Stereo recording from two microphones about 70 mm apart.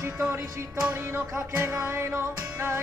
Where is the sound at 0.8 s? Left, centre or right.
Right.